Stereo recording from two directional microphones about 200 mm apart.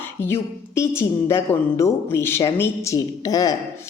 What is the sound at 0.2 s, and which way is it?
A woman's voice, 10° left (ahead or behind).